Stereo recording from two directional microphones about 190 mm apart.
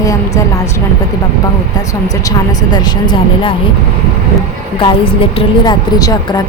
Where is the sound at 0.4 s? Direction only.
15° left (ahead or behind).